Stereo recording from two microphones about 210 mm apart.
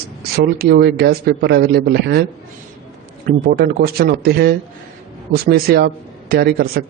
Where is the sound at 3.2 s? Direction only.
45° right (ahead or behind).